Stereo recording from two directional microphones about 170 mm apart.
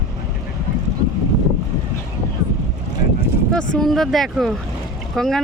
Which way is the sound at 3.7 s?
Centre (ahead or behind).